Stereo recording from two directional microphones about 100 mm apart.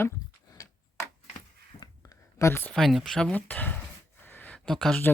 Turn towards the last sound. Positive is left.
turn(degrees=5)  # may be behind; listen again after turning